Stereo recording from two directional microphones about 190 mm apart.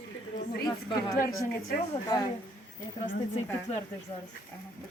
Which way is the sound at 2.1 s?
20° left (ahead or behind).